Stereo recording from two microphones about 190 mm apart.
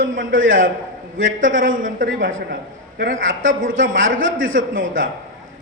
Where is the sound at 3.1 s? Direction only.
90° right.